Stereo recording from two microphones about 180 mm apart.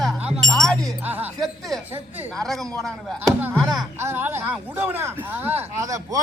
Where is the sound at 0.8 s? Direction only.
10° right (ahead or behind).